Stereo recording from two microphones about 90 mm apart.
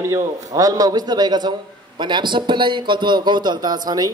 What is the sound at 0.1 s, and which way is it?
A man's voice, 40° right (ahead or behind).